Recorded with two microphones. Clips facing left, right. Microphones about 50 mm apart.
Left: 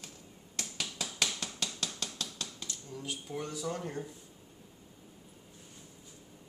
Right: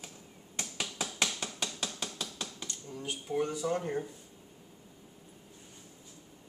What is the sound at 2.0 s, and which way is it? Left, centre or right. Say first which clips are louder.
Dishes: right 1 dB; centre.